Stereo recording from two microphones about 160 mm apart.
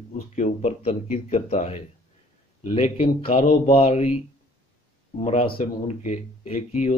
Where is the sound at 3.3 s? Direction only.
55° left (ahead or behind).